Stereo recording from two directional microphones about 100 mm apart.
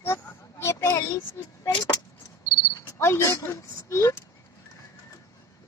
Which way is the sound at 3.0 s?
25° left (ahead or behind).